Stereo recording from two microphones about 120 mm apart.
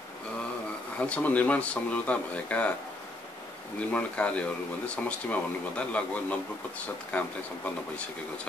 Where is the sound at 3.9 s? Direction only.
10° left (ahead or behind).